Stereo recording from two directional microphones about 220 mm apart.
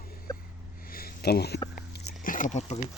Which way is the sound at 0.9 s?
40° left (ahead or behind).